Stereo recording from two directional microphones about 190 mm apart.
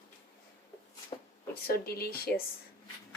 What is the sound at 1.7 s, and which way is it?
Speech, 55° left (ahead or behind).